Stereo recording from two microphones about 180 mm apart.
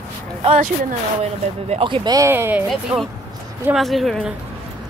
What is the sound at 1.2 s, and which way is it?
Speech, 35° right (ahead or behind).